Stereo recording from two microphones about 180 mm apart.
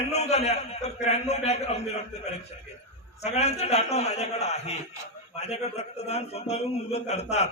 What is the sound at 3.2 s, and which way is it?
A man's voice, 35° left (ahead or behind).